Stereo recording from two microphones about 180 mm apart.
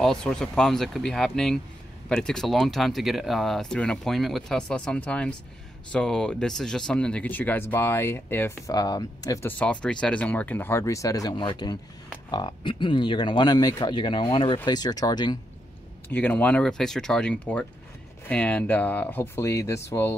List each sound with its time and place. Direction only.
0.0 s speech: 5° left (ahead or behind); by 15.3 s 25° left (ahead or behind)
16.1 s speech: 10° left (ahead or behind)